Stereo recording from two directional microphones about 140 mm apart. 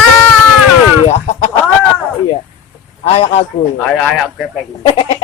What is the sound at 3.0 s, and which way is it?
Speech, 50° left (ahead or behind).